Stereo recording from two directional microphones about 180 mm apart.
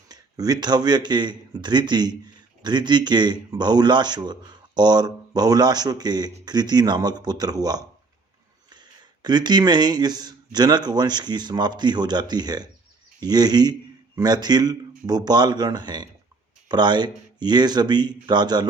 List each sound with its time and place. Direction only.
0.1 s speech: 20° right (ahead or behind)